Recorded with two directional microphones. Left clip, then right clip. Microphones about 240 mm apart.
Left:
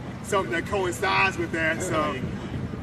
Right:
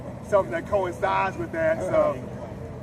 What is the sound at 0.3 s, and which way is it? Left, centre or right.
Speech, left.